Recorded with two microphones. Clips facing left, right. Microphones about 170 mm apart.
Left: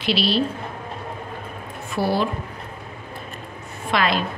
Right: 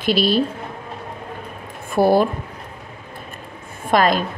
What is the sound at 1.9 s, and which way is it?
Speech, 50° right (ahead or behind).